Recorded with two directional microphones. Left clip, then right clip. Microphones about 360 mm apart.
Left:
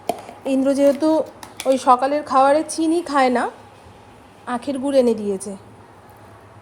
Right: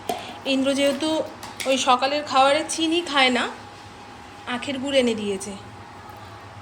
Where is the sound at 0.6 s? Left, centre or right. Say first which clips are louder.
Left 7 dB; centre.